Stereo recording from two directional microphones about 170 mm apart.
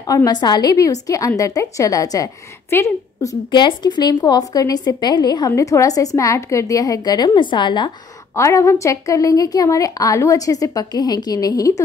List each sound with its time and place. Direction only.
0.0 s a woman's voice: 20° left (ahead or behind)